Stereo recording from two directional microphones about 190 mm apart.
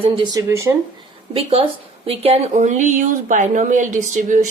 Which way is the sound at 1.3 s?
30° right (ahead or behind).